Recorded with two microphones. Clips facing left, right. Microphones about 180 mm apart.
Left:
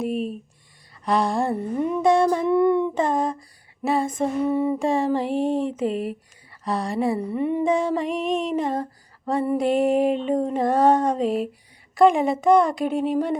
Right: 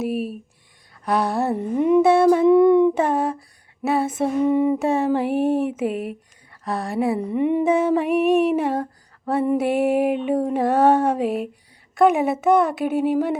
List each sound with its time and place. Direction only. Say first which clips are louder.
0.0 s a sound: right 1 dB; 5° right (ahead or behind)
1.0 s female singing: right 1 dB; 5° right (ahead or behind)
7.2 s female singing: right 3 dB; 15° right (ahead or behind)
7.7 s female singing: right 4 dB; 5° right (ahead or behind)